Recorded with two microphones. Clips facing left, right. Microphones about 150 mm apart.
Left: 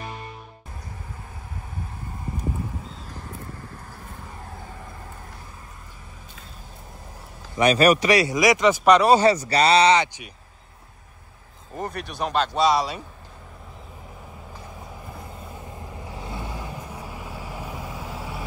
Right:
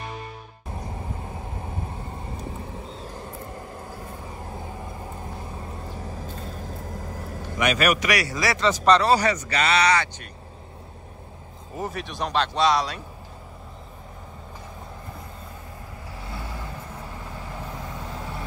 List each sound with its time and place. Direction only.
7.0 s vehicle: 90° right
7.5 s speech: 35° left (ahead or behind); by 9.2 s 15° left (ahead or behind)
9.2 s speech: 35° left (ahead or behind)
11.7 s speech: 5° right (ahead or behind)
16.1 s vehicle: 20° left (ahead or behind)